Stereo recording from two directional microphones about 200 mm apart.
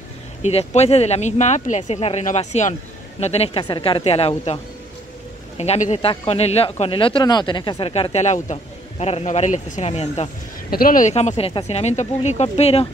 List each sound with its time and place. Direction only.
0.4 s speech: 30° left (ahead or behind)
5.6 s speech: 35° left (ahead or behind)
10.7 s speech: 45° left (ahead or behind)